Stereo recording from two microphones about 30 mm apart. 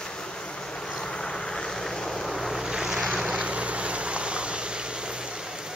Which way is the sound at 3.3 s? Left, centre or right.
Right.